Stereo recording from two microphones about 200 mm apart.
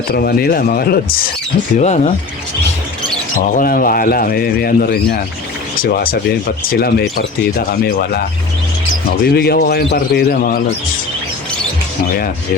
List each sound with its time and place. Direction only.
0.1 s speech: 50° left (ahead or behind)
1.7 s speech: 35° left (ahead or behind)
3.5 s speech: 45° left (ahead or behind)
9.3 s speech: 50° left (ahead or behind)